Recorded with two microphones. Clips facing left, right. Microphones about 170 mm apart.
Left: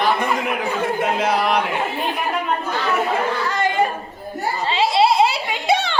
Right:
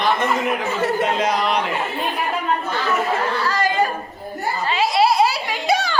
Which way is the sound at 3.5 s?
20° left (ahead or behind).